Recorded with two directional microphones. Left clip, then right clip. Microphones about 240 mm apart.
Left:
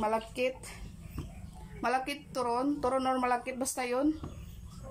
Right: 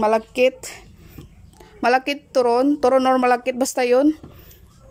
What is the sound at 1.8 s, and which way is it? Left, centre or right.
A woman's voice, right.